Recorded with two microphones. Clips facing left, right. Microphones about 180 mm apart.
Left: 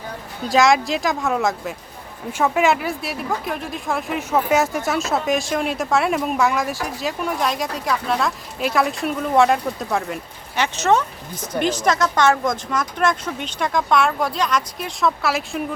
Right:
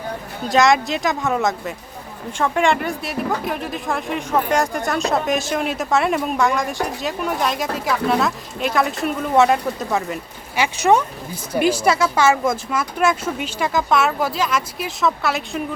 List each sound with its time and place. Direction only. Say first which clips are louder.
0.4 s speech: even; centre (ahead or behind)